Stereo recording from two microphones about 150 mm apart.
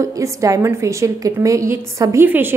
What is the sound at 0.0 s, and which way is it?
A woman's voice, 20° right (ahead or behind).